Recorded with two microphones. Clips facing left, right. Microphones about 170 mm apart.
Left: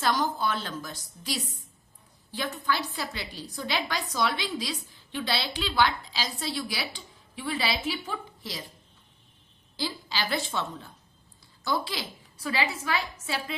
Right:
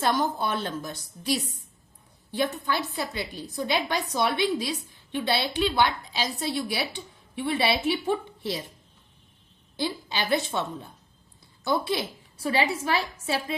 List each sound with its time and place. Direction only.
0.0 s a woman's voice: 25° right (ahead or behind)
9.7 s a woman's voice: 25° right (ahead or behind)